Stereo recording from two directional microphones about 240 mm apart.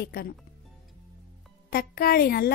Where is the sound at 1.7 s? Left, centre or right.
Left.